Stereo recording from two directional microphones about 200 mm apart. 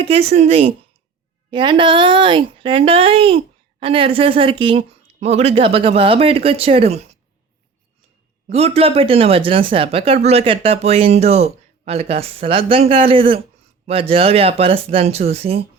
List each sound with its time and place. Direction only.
0.0 s a woman's voice: 30° right (ahead or behind)
8.4 s speech: 30° right (ahead or behind)